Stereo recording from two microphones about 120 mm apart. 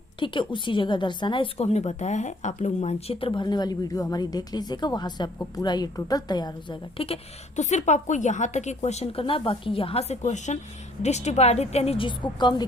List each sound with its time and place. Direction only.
0.2 s a woman's voice: 45° left (ahead or behind)
1.5 s a woman's voice: 65° left (ahead or behind); by 2.9 s 80° left
3.1 s a woman's voice: 50° left (ahead or behind)
6.9 s a woman's voice: 50° left (ahead or behind)
7.5 s a woman's voice: 75° left (ahead or behind)
9.2 s a woman's voice: 45° left (ahead or behind); by 10.6 s 80° left
11.0 s a woman's voice: 70° left (ahead or behind); by 12.6 s 40° left (ahead or behind)